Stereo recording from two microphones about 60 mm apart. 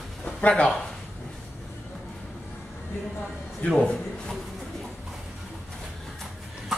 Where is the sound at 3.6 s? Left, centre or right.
Centre.